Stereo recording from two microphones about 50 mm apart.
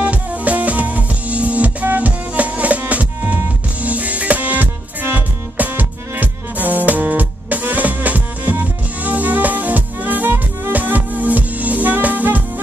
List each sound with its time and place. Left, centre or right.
0.0 s music: right